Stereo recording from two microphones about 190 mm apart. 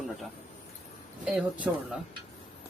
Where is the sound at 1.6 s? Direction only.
10° right (ahead or behind).